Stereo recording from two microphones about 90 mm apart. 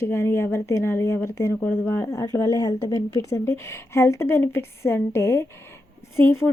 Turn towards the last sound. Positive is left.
turn(degrees=30)  # may be behind; listen again after turning